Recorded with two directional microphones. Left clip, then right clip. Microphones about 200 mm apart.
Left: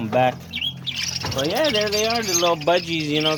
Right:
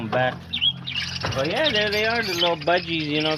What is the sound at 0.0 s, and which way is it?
Speech, 45° left (ahead or behind).